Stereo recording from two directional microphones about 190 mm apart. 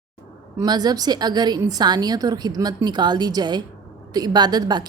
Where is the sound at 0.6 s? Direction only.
20° right (ahead or behind).